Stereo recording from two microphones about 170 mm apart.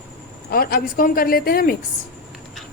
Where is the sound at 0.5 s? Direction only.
60° left (ahead or behind).